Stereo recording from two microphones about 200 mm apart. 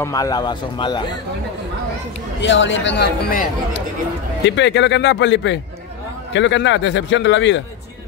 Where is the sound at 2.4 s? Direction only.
65° left (ahead or behind).